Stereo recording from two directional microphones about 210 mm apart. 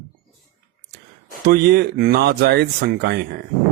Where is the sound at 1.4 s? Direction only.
50° right (ahead or behind).